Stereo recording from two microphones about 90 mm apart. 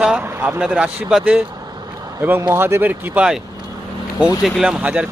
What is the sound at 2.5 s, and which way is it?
Speech, 30° right (ahead or behind).